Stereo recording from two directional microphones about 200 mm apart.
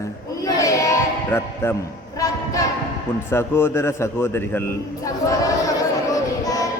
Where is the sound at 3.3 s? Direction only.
10° left (ahead or behind).